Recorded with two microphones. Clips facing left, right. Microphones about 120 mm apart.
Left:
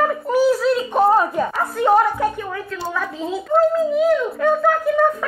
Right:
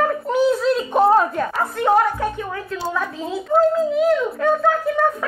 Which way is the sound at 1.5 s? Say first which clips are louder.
Left 1 dB; 5° left (ahead or behind).